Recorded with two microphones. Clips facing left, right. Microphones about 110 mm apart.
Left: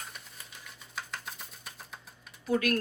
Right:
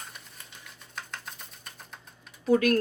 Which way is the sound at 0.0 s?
Centre (ahead or behind).